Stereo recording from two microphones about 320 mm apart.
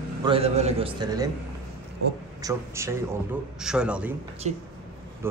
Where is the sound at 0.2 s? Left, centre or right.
Centre.